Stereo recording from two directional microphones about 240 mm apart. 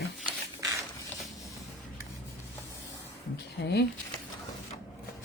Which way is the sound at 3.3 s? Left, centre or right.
Left.